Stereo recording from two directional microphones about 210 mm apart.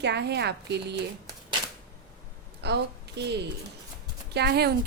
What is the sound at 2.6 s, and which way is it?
Speech, 55° right (ahead or behind).